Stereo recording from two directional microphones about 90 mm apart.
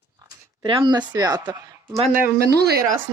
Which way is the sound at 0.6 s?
55° right (ahead or behind).